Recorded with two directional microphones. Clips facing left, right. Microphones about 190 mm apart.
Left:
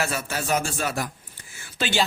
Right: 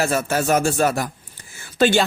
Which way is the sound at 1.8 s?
50° right (ahead or behind).